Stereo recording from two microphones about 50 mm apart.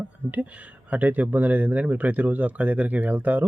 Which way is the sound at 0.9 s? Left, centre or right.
Right.